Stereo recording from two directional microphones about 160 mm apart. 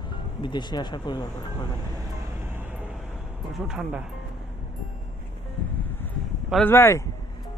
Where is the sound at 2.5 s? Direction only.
10° right (ahead or behind).